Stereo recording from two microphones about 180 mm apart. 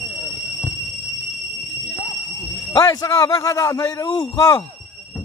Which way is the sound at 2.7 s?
20° left (ahead or behind).